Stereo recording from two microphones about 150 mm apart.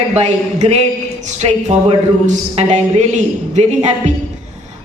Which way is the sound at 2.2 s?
50° right (ahead or behind).